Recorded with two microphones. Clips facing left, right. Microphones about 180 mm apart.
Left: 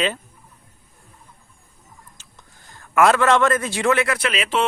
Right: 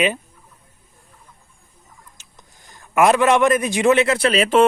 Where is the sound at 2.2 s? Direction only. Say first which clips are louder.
Even; 15° right (ahead or behind).